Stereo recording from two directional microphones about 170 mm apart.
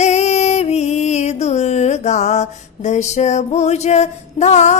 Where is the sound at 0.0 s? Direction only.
40° left (ahead or behind).